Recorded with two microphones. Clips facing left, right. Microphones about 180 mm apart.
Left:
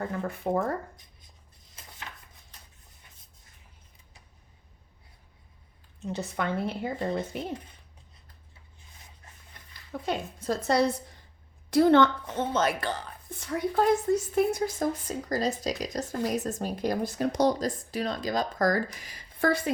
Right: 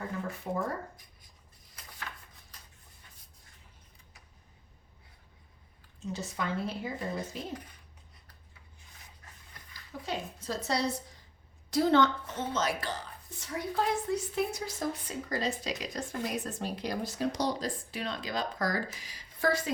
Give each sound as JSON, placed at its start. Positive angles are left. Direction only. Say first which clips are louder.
{"t": 0.4, "sound": "speech", "louder": "left 8 dB", "side_deg": 50}
{"t": 6.0, "sound": "a woman's voice", "louder": "left 4 dB", "side_deg": 60}
{"t": 10.1, "sound": "a woman's voice", "louder": "left 6 dB", "side_deg": 55}